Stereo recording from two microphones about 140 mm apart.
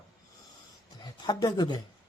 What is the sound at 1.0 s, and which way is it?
Speech, 30° left (ahead or behind).